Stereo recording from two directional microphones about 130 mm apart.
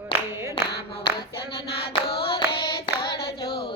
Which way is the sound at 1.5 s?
40° left (ahead or behind).